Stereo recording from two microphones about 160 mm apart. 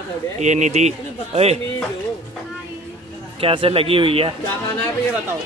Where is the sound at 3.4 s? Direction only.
35° right (ahead or behind).